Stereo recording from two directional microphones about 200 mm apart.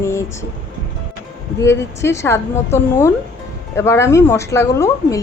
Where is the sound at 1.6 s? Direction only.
15° left (ahead or behind).